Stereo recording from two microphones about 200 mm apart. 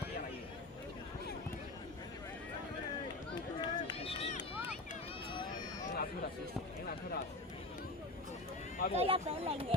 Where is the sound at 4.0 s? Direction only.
30° left (ahead or behind).